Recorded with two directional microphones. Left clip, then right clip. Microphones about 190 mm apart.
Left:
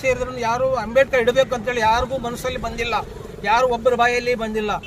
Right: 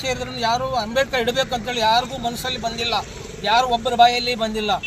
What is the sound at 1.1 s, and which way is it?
Speech, centre (ahead or behind).